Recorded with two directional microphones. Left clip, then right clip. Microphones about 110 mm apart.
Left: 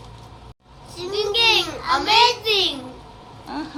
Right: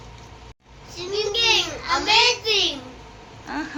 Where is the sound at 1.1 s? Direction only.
65° left (ahead or behind).